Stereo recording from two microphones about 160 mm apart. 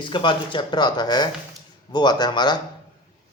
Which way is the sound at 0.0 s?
30° left (ahead or behind).